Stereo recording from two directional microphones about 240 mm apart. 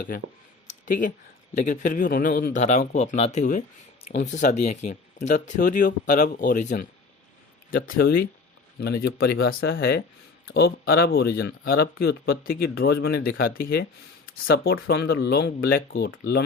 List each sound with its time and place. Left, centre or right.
0.7 s a sound: left
1.5 s speech: left
7.9 s speech: left